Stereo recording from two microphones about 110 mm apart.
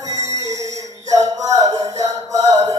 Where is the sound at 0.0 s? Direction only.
30° right (ahead or behind).